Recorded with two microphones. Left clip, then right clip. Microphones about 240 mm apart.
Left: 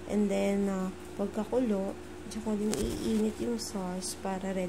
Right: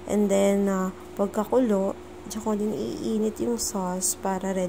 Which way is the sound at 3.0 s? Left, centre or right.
Centre.